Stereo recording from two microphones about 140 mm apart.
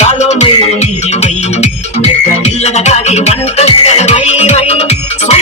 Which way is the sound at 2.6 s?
50° left (ahead or behind).